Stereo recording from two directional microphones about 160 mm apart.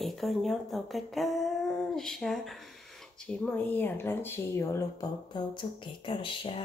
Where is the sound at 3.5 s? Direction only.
10° left (ahead or behind); by 6.6 s 35° left (ahead or behind).